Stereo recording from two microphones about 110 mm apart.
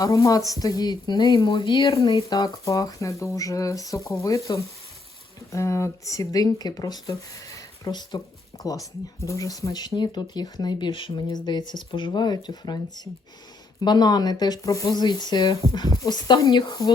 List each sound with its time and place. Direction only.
0.0 s speech: 30° left (ahead or behind); by 1.9 s 45° left (ahead or behind)
1.9 s speech: 30° left (ahead or behind)
13.8 s speech: 40° left (ahead or behind)